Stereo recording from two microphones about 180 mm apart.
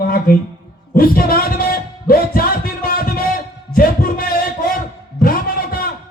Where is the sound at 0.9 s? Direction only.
55° left (ahead or behind).